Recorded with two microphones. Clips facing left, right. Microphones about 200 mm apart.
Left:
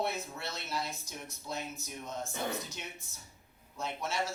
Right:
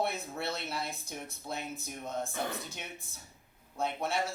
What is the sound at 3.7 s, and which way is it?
Speech, 55° right (ahead or behind).